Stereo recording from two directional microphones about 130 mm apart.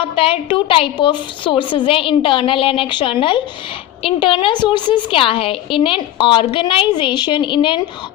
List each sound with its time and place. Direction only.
0.0 s a woman's voice: 45° left (ahead or behind)